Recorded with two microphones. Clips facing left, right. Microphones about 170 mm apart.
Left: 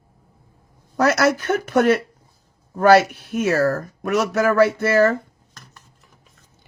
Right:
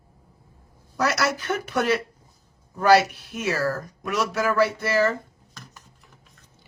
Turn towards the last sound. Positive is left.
turn(degrees=55)  # may be behind; listen again after turning